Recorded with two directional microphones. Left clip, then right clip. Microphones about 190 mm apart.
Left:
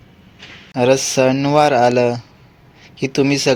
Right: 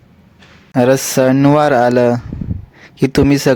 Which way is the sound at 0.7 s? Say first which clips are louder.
Right 2 dB; 45° right (ahead or behind).